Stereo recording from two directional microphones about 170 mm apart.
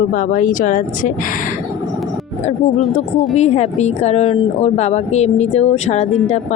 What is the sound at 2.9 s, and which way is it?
Speech, 45° left (ahead or behind).